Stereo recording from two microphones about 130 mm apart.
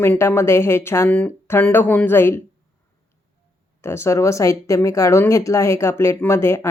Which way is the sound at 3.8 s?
20° left (ahead or behind).